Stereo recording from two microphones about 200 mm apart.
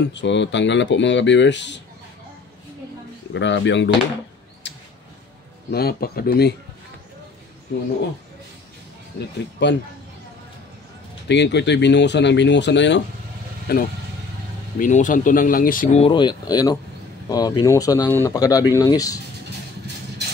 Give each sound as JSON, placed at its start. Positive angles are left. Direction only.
{"t": 0.1, "sound": "speech", "side_deg": 65}
{"t": 3.3, "sound": "speech", "side_deg": 65}
{"t": 4.6, "sound": "a sound", "side_deg": 60}
{"t": 5.7, "sound": "speech", "side_deg": 50}
{"t": 9.6, "sound": "speech", "side_deg": 60}
{"t": 11.2, "sound": "speech", "side_deg": 60}
{"t": 13.7, "sound": "speech", "side_deg": 50}
{"t": 14.8, "sound": "speech", "side_deg": 40}
{"t": 16.0, "sound": "speech", "side_deg": 25}